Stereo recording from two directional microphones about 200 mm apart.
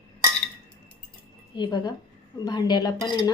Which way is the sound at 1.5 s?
20° left (ahead or behind).